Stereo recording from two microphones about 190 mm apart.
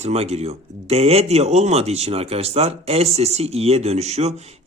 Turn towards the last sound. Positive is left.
turn(degrees=-35)  # may be behind; listen again after turning